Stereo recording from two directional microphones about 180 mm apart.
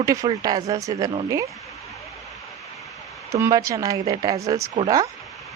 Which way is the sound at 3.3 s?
15° right (ahead or behind).